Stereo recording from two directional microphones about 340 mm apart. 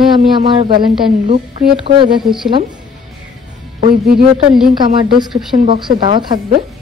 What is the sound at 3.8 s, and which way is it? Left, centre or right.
Speech, right.